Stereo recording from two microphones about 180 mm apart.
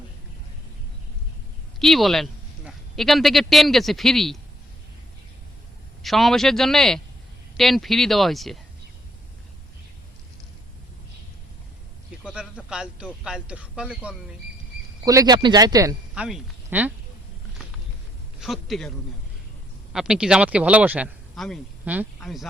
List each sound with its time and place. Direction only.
1.8 s speech: centre (ahead or behind)
6.0 s speech: centre (ahead or behind)
12.2 s speech: 5° right (ahead or behind)
15.0 s speech: 20° right (ahead or behind)
16.1 s speech: 5° right (ahead or behind)
18.3 s a man's voice: centre (ahead or behind)